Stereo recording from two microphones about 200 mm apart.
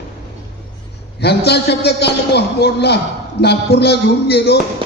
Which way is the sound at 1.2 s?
55° left (ahead or behind).